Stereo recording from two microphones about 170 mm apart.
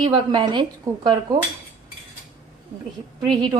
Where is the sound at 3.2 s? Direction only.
30° right (ahead or behind).